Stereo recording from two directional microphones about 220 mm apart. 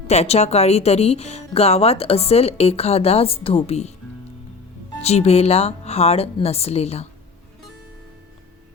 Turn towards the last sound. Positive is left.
turn(degrees=30)  # may be behind; listen again after turning